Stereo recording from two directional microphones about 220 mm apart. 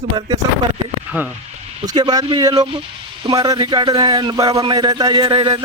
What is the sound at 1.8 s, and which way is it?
Speech, 20° right (ahead or behind).